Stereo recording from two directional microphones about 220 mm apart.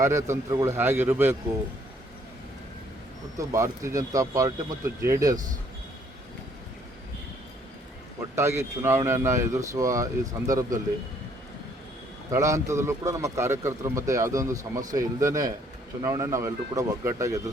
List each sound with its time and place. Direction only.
0.0 s speech: 15° right (ahead or behind)
3.3 s speech: 15° right (ahead or behind)
8.4 s speech: 10° right (ahead or behind)
12.3 s speech: 15° right (ahead or behind)